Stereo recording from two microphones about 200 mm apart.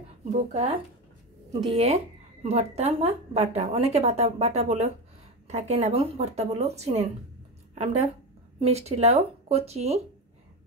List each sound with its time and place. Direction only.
0.2 s a woman's voice: 35° right (ahead or behind)
1.7 s a woman's voice: 30° right (ahead or behind)